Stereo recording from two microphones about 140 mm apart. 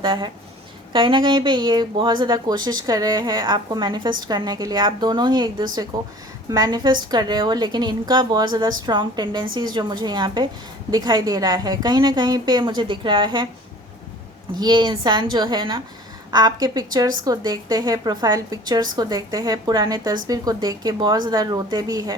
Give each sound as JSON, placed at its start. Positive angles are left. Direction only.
{"t": 0.0, "sound": "a woman's voice", "side_deg": -35}
{"t": 14.5, "sound": "a woman's voice", "side_deg": -30}